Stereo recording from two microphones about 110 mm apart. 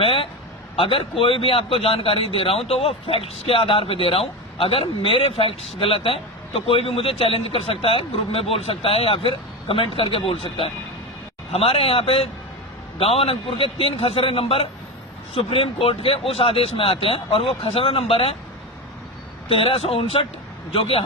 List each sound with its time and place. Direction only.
0.0 s a man's voice: 55° left (ahead or behind)
19.5 s a man's voice: 60° left (ahead or behind)